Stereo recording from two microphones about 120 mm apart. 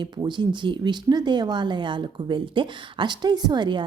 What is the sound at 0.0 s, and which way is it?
Speech, 40° right (ahead or behind).